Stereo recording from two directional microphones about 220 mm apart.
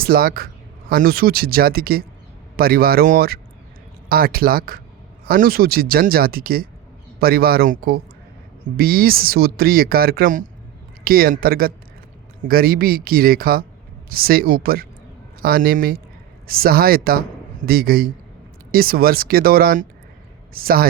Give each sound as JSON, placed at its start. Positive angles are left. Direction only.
{"t": 0.0, "sound": "speech", "side_deg": -45}